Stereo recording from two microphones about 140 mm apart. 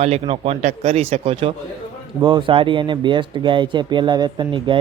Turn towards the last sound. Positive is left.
turn(degrees=-35)  # may be behind; listen again after turning